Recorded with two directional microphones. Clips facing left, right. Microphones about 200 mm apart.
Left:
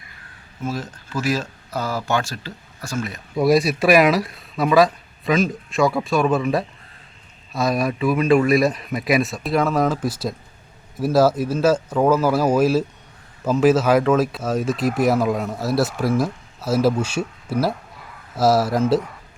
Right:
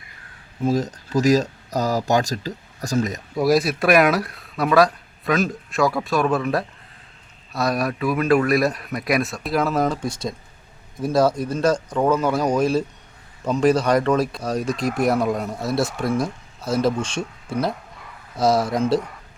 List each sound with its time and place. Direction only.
0.6 s speech: 40° right (ahead or behind)
3.3 s speech: centre (ahead or behind)